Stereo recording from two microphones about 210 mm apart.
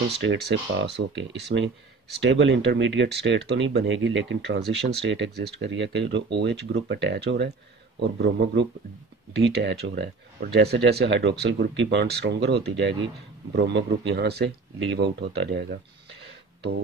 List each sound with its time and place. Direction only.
0.2 s speech: 55° right (ahead or behind)